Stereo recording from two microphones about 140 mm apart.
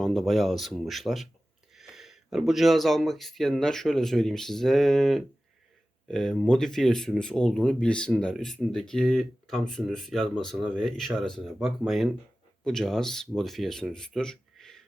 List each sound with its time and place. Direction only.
0.0 s speech: centre (ahead or behind)